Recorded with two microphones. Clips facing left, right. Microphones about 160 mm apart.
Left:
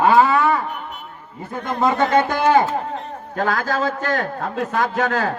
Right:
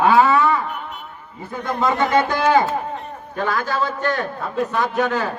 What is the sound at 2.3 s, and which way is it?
Livestock, 50° left (ahead or behind).